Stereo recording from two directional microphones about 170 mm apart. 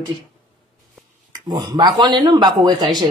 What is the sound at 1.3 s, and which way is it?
Speech, 25° right (ahead or behind).